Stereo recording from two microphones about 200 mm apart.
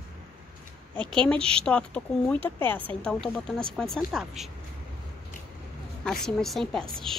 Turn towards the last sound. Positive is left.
turn(degrees=5)  # may be behind; listen again after turning